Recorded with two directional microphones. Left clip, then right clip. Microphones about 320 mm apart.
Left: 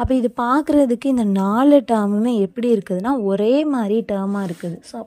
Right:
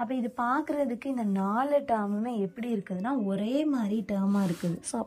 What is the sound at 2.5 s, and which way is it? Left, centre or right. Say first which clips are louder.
A woman's voice: left 16 dB; centre.